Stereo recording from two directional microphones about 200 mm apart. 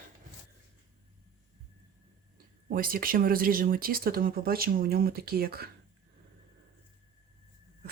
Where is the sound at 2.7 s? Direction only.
45° right (ahead or behind).